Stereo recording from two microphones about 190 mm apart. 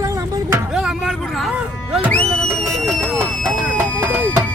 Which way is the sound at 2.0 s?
5° left (ahead or behind).